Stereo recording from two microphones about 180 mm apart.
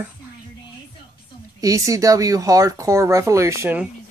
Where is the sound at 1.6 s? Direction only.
20° right (ahead or behind).